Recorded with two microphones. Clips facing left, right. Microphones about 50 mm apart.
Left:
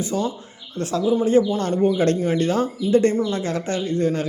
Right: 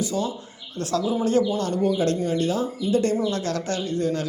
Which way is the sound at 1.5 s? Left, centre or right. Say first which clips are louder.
Left 3 dB; left.